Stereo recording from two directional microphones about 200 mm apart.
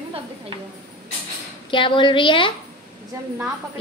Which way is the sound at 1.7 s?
25° left (ahead or behind).